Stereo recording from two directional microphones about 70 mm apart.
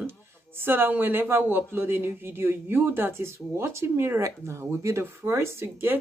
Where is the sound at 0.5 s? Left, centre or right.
Right.